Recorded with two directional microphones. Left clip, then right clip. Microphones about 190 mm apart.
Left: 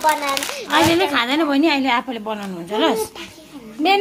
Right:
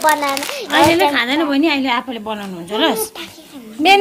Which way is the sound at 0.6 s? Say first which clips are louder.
Right 4 dB; 5° right (ahead or behind).